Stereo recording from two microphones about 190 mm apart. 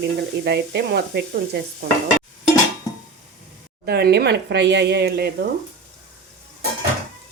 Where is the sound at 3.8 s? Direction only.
55° right (ahead or behind).